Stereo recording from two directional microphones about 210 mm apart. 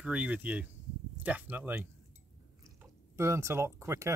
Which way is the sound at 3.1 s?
15° right (ahead or behind).